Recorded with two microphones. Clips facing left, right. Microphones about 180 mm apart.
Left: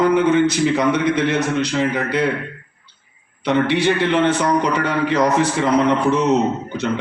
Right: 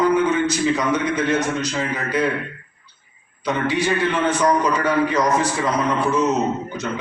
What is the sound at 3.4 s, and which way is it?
A man's voice, 65° left (ahead or behind).